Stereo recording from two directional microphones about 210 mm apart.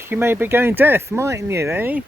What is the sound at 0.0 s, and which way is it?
Speech, 10° right (ahead or behind).